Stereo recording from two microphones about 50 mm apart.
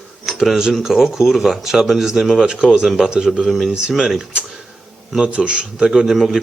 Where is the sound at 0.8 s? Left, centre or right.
Centre.